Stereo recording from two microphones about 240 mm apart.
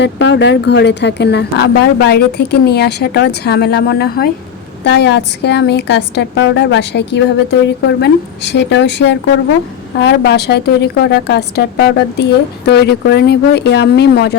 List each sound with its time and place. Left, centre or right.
0.0 s a woman's voice: left